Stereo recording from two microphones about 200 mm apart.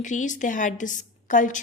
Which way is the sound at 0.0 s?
40° left (ahead or behind).